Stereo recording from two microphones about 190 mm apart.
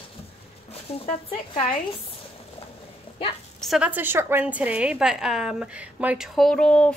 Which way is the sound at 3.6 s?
5° right (ahead or behind).